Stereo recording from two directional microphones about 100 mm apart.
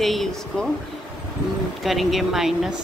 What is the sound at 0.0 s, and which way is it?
Speech, centre (ahead or behind).